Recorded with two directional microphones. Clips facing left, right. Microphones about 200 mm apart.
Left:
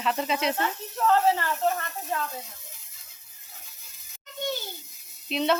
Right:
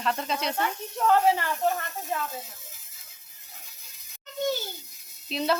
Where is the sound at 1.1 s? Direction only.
15° right (ahead or behind).